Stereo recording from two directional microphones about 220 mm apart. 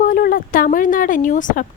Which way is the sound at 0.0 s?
40° left (ahead or behind).